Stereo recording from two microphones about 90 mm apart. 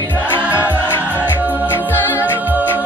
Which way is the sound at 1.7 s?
25° left (ahead or behind).